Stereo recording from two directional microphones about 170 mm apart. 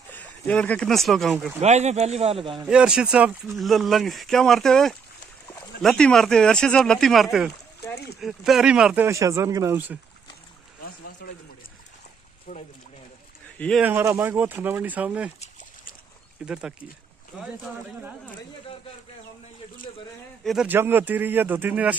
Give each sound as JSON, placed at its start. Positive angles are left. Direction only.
{"t": 0.1, "sound": "speech", "side_deg": 10}
{"t": 1.6, "sound": "speech", "side_deg": -40}
{"t": 2.6, "sound": "speech", "side_deg": -5}
{"t": 11.2, "sound": "speech", "side_deg": 65}
{"t": 12.5, "sound": "speech", "side_deg": 40}
{"t": 13.6, "sound": "speech", "side_deg": 5}
{"t": 13.8, "sound": "speech", "side_deg": -15}
{"t": 16.4, "sound": "speech", "side_deg": -5}
{"t": 20.4, "sound": "speech", "side_deg": -5}